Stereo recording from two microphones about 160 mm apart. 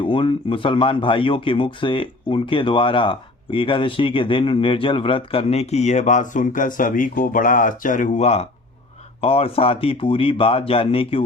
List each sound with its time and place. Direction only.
0.0 s speech: 30° left (ahead or behind)